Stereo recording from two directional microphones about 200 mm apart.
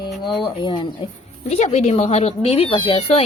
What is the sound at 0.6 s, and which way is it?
Speech, 25° left (ahead or behind).